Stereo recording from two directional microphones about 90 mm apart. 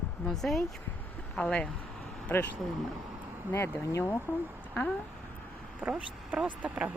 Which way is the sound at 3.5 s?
25° left (ahead or behind).